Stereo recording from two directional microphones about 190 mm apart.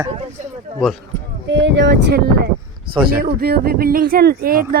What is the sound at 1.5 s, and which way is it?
Speech, 70° right (ahead or behind).